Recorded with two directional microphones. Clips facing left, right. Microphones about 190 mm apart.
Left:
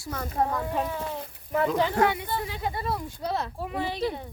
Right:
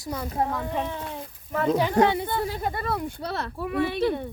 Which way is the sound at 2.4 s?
40° right (ahead or behind).